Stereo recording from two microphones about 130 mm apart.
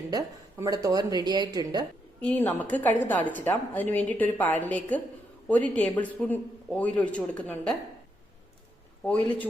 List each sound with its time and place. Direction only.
0.1 s speech: 30° right (ahead or behind)
2.2 s a woman's voice: 15° left (ahead or behind)
9.0 s a woman's voice: 10° left (ahead or behind)